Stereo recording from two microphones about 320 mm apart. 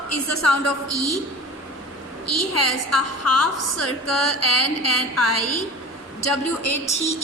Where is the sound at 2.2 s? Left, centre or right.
Left.